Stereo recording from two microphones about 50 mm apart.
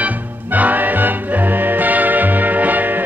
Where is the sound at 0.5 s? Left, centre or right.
Right.